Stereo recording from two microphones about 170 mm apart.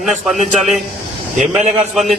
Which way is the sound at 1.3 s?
45° right (ahead or behind).